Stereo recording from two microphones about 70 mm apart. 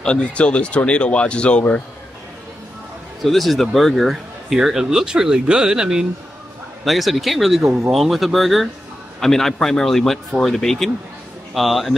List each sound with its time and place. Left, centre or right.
0.0 s speech: centre
3.2 s speech: centre